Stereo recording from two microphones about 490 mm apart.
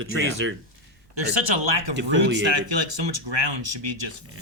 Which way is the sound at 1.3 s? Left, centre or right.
Right.